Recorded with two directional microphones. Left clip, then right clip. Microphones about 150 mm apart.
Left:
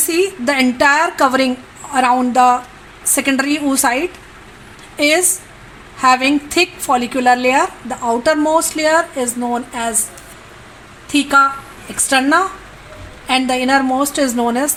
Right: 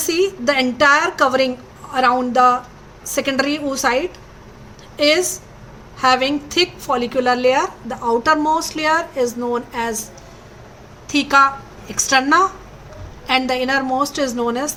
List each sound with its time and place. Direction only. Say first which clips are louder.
0.1 s a woman's voice: left 1 dB; 45° left (ahead or behind)
11.1 s a woman's voice: left 1 dB; 40° left (ahead or behind)